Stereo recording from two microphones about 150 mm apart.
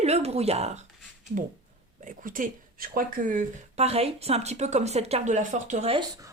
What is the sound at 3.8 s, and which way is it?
Speech, 45° right (ahead or behind).